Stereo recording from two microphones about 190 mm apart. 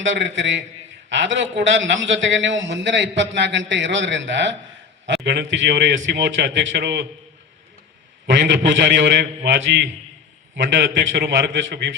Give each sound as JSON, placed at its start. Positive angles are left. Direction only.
{"t": 0.0, "sound": "a man's voice", "side_deg": -70}
{"t": 8.3, "sound": "a man's voice", "side_deg": -70}
{"t": 11.2, "sound": "a man's voice", "side_deg": -65}